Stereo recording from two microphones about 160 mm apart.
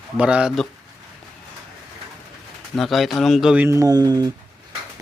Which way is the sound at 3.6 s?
20° right (ahead or behind).